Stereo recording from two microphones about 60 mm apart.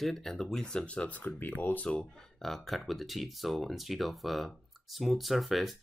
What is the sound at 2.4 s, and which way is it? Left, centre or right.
Speech, centre.